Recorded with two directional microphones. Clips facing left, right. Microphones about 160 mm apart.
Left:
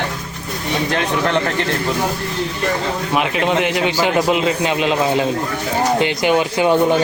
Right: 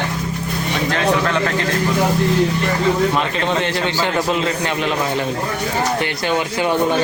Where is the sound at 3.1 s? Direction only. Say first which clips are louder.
Left 2 dB; 15° left (ahead or behind).